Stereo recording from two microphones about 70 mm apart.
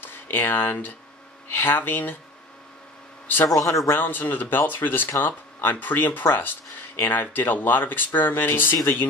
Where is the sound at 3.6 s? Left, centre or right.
Left.